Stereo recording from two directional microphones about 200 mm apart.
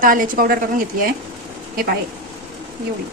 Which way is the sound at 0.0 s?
45° right (ahead or behind).